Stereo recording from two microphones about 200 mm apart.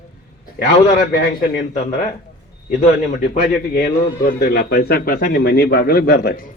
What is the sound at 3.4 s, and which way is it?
A man's voice, 50° left (ahead or behind).